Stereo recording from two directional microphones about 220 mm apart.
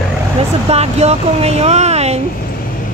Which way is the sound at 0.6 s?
30° right (ahead or behind).